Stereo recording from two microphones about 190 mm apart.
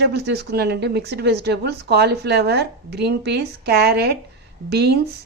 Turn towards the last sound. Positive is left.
turn(degrees=-55)  # may be behind; listen again after turning